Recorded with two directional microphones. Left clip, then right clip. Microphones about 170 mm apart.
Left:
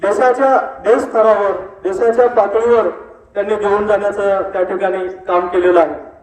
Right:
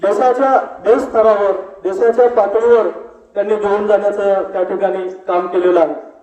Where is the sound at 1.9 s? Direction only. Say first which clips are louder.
Even; 10° left (ahead or behind).